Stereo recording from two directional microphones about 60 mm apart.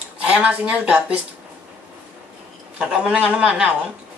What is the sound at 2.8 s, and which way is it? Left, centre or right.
Speech, centre.